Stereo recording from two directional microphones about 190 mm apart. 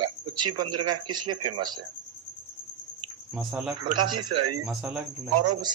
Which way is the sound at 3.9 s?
25° right (ahead or behind).